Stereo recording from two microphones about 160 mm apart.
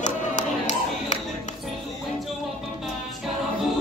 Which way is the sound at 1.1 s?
50° left (ahead or behind).